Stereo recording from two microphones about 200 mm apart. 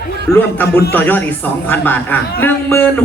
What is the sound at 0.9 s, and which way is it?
Speech, 10° left (ahead or behind).